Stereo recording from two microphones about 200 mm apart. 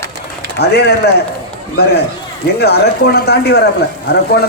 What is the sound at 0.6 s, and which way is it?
Speech, 55° left (ahead or behind).